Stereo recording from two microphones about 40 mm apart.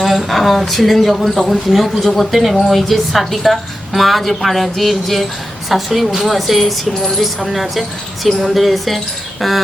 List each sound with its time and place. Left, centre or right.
0.0 s speech: centre